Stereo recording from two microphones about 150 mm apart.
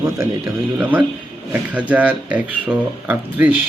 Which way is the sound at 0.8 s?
10° right (ahead or behind).